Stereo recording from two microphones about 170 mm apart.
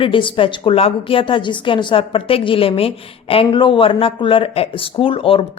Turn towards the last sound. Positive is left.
turn(degrees=35)  # may be behind; listen again after turning